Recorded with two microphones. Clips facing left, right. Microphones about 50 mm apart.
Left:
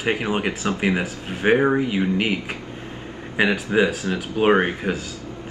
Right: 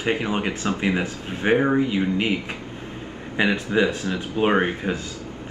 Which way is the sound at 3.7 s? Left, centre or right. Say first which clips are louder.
Left 1 dB; centre.